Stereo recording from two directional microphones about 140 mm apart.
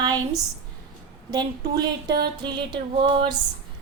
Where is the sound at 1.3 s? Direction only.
30° right (ahead or behind).